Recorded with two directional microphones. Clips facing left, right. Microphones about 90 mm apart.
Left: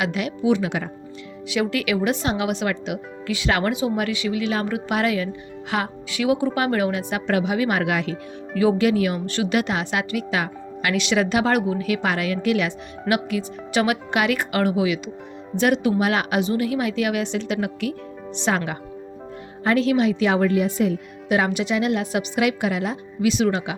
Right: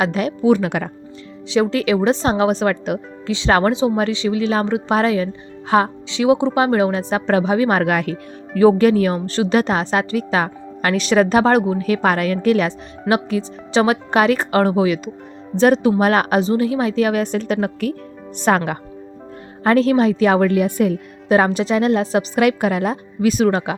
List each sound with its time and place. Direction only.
0.0 s a woman's voice: 35° right (ahead or behind)
1.5 s a woman's voice: 30° right (ahead or behind)
3.2 s a woman's voice: 30° right (ahead or behind); by 18.8 s 50° right (ahead or behind)
19.6 s a woman's voice: 40° right (ahead or behind)
21.2 s a woman's voice: 40° right (ahead or behind)
22.4 s a woman's voice: 45° right (ahead or behind)